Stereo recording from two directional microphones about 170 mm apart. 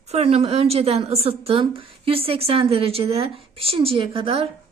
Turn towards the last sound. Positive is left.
turn(degrees=-35)  # may be behind; listen again after turning